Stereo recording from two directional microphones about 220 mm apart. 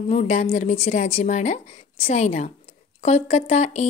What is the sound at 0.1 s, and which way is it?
A woman's voice, 30° left (ahead or behind).